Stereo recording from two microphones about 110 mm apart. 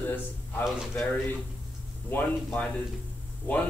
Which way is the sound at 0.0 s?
15° left (ahead or behind).